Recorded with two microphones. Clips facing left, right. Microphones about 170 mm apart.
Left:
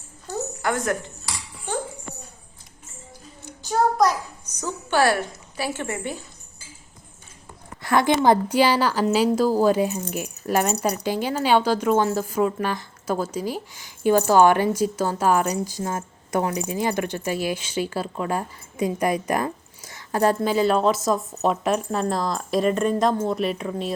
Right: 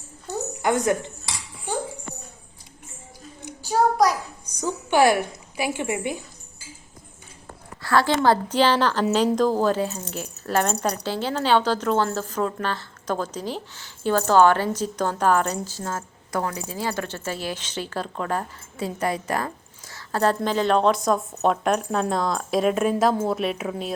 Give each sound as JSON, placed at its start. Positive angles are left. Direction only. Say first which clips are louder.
{"t": 0.6, "sound": "cutlery", "louder": "right 4 dB", "side_deg": -20}
{"t": 3.4, "sound": "a child's voice", "louder": "right 1 dB", "side_deg": -10}
{"t": 7.8, "sound": "speech", "louder": "left 1 dB", "side_deg": 20}